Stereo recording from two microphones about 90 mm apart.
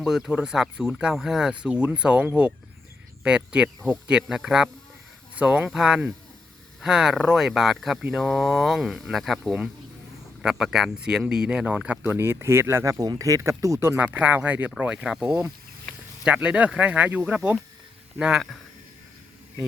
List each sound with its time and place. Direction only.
0.0 s speech: 5° right (ahead or behind)
12.0 s speech: 25° right (ahead or behind); by 18.6 s 5° right (ahead or behind)